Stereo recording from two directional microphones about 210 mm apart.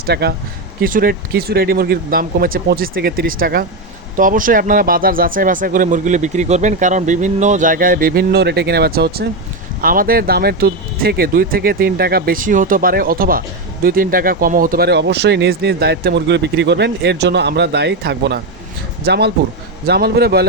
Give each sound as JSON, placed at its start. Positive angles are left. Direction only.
{"t": 0.0, "sound": "speech", "side_deg": -50}